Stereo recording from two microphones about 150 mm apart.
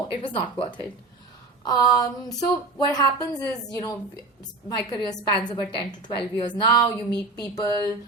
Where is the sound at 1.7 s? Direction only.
25° left (ahead or behind).